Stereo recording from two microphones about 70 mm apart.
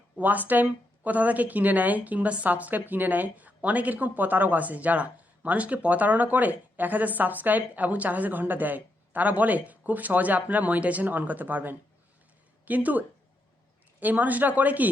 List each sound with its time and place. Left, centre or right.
0.2 s a woman's voice: right